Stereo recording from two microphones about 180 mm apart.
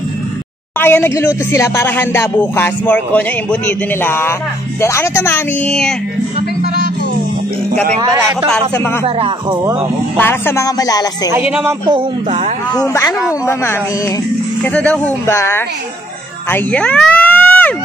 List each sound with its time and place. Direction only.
0.7 s speech: 10° left (ahead or behind)
8.5 s speech: 10° left (ahead or behind)
9.0 s speech: 25° right (ahead or behind)
10.1 s speech: 10° left (ahead or behind)
11.2 s speech: 10° right (ahead or behind)
12.7 s speech: 15° left (ahead or behind)
14.6 s speech: 10° left (ahead or behind)
16.4 s a sound: 10° left (ahead or behind)